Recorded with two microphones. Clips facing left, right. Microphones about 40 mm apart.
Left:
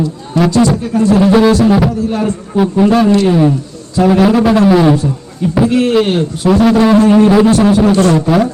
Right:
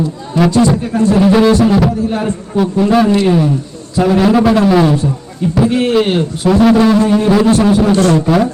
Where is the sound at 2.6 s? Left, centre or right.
Centre.